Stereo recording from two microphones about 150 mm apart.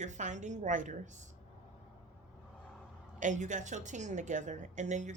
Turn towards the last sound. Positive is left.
turn(degrees=-55)  # may be behind; listen again after turning